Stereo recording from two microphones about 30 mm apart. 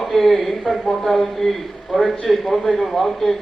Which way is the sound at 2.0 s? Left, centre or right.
Left.